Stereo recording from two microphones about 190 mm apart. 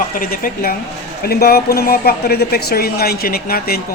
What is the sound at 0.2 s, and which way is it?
Speech, 50° left (ahead or behind).